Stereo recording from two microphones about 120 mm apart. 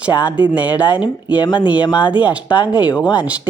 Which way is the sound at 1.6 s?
40° left (ahead or behind).